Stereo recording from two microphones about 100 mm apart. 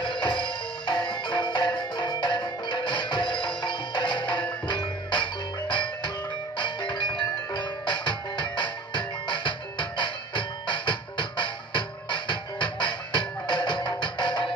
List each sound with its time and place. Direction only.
0.0 s music: 50° left (ahead or behind)